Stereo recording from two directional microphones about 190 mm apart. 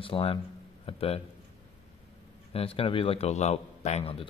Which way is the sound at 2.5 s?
30° left (ahead or behind).